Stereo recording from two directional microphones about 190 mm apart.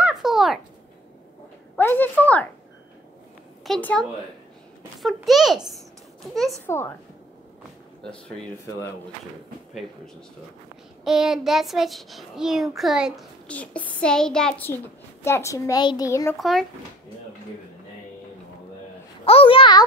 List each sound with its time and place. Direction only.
0.0 s a sound: centre (ahead or behind)
1.8 s speech: 10° left (ahead or behind)
3.6 s a child's voice: 5° left (ahead or behind)
11.1 s a child's voice: centre (ahead or behind); by 16.3 s 15° left (ahead or behind)
16.3 s a child's voice: centre (ahead or behind)
19.2 s a child's voice: 30° left (ahead or behind)